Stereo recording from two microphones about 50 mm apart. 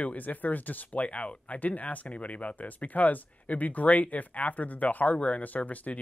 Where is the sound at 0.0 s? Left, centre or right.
Left.